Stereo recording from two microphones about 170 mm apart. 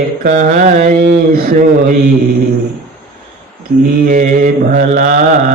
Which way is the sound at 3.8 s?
60° right (ahead or behind).